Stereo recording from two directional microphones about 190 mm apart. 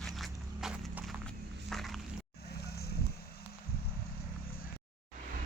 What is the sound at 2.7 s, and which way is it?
Vehicle, 55° left (ahead or behind).